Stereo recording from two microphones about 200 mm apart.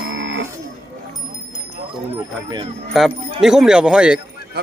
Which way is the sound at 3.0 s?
Centre (ahead or behind).